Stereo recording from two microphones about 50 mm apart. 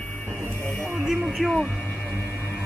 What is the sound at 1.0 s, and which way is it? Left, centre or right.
Speech, centre.